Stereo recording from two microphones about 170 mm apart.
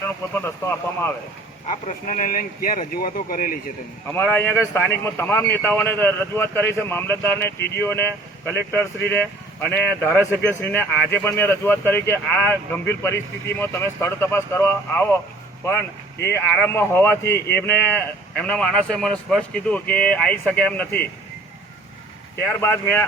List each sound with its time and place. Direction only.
0.3 s speech: 15° left (ahead or behind)
1.6 s speech: 50° left (ahead or behind)
4.1 s speech: 10° left (ahead or behind)
16.5 s speech: 10° left (ahead or behind)
22.6 s speech: 15° left (ahead or behind)